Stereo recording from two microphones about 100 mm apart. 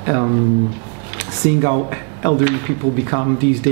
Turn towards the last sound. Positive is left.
turn(degrees=-25)  # may be behind; listen again after turning